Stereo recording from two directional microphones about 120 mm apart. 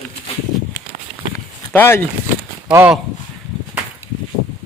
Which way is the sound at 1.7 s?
20° left (ahead or behind).